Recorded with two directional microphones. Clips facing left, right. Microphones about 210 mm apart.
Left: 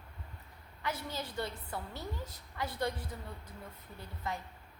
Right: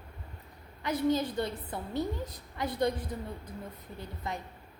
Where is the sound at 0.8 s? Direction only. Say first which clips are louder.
Right 11 dB; 15° right (ahead or behind).